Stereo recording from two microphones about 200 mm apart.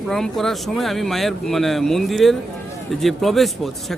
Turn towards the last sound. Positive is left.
turn(degrees=0)  # may be behind; listen again after turning